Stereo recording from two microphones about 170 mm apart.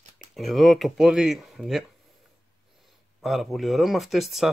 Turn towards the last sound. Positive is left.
turn(degrees=0)  # may be behind; listen again after turning